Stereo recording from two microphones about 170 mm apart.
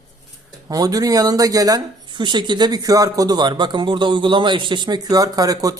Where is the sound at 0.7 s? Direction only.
20° right (ahead or behind).